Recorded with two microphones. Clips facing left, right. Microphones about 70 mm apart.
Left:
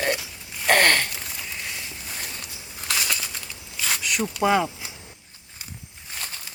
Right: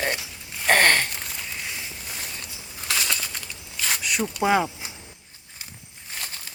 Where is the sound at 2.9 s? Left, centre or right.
Centre.